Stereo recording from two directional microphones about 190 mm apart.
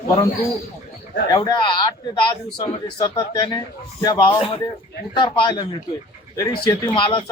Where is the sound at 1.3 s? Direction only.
25° left (ahead or behind).